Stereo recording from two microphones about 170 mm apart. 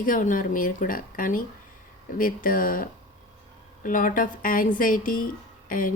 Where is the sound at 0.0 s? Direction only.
50° left (ahead or behind).